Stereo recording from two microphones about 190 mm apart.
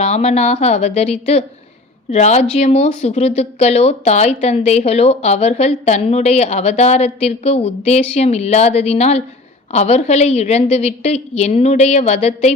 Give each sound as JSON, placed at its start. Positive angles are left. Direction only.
{"t": 0.0, "sound": "speech", "side_deg": 35}